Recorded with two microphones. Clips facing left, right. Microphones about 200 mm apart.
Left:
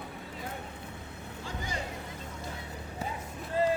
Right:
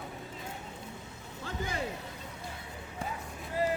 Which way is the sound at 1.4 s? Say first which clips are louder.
Right 2 dB; 55° right (ahead or behind).